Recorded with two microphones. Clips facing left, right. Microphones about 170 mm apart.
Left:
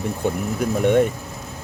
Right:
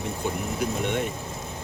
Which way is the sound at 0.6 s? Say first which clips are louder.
Left 11 dB; 50° left (ahead or behind).